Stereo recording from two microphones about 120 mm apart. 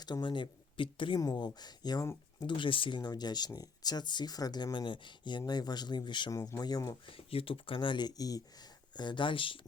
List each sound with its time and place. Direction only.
0.0 s speech: 35° left (ahead or behind)
1.2 s speech: 35° left (ahead or behind)
6.3 s speech: 30° left (ahead or behind)
7.1 s speech: 50° left (ahead or behind)